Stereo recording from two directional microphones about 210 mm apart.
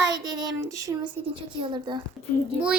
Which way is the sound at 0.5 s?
15° right (ahead or behind).